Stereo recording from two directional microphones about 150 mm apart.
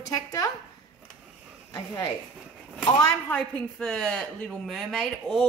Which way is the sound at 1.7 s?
25° left (ahead or behind).